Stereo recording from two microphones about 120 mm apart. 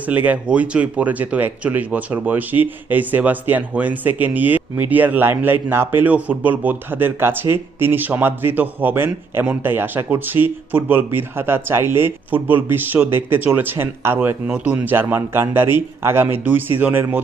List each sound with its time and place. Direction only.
0.1 s speech: 15° right (ahead or behind)